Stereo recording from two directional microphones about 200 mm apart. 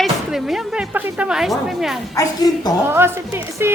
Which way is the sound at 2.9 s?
10° right (ahead or behind).